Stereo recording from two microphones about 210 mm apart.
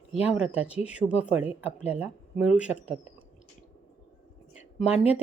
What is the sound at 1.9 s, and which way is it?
Speech, 5° right (ahead or behind).